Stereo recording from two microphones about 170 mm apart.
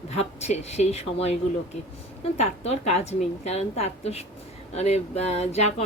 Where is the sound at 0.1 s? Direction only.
40° left (ahead or behind).